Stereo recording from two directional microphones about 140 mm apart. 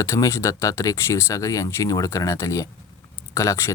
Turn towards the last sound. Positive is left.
turn(degrees=20)  # may be behind; listen again after turning